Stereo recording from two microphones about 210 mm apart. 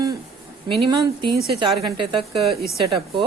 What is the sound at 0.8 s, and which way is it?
Speech, 20° right (ahead or behind).